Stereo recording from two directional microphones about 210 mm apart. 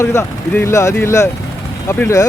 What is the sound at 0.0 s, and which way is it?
Speech, 10° left (ahead or behind).